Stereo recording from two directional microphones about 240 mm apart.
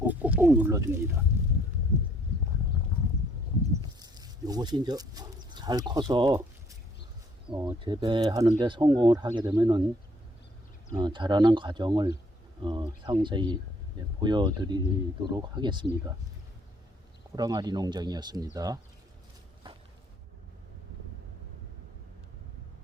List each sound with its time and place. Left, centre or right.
0.1 s speech: centre
4.0 s speech: centre
10.9 s speech: centre
17.3 s speech: centre
19.6 s a sound: centre